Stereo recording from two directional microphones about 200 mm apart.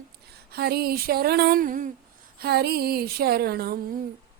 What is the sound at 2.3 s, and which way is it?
A woman's voice, 55° right (ahead or behind).